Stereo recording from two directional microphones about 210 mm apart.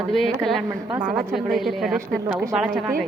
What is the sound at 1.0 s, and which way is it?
Speech, 45° right (ahead or behind).